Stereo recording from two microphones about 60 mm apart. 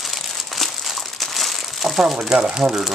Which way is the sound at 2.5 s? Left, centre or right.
Centre.